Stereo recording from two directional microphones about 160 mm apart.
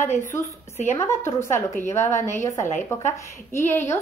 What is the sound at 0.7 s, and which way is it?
Speech, 45° left (ahead or behind).